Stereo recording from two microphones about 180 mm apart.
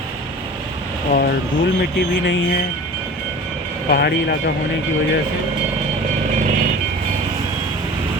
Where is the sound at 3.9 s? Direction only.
60° left (ahead or behind).